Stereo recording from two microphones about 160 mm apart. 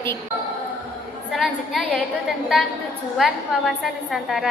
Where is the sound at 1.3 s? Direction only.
Centre (ahead or behind).